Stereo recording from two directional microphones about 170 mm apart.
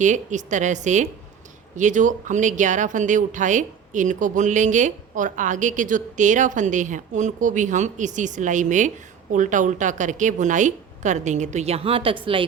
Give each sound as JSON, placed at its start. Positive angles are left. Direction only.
{"t": 0.0, "sound": "speech", "side_deg": -45}